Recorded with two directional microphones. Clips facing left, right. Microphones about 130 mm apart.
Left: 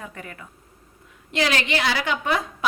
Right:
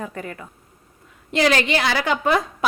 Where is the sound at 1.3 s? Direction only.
40° right (ahead or behind).